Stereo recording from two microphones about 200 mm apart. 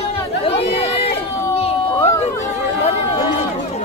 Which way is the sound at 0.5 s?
30° left (ahead or behind).